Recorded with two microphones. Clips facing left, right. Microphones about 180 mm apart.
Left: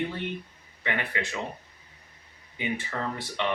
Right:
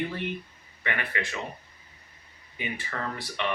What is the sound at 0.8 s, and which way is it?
Speech, 20° left (ahead or behind).